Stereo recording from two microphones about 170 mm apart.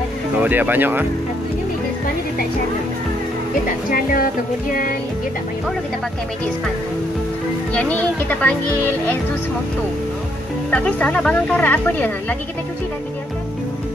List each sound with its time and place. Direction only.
0.4 s speech: 10° right (ahead or behind)
3.6 s speech: 55° left (ahead or behind)
7.7 s speech: 10° left (ahead or behind)
10.7 s speech: 10° left (ahead or behind)